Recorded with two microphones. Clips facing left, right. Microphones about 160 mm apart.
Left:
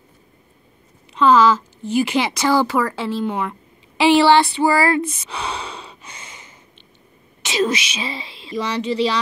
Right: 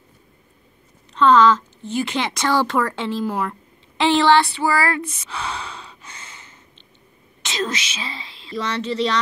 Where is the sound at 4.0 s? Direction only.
15° left (ahead or behind).